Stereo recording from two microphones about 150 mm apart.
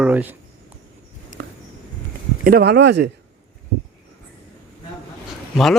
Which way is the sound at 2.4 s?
85° right.